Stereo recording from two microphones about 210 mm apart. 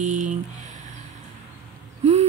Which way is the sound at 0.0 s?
35° right (ahead or behind).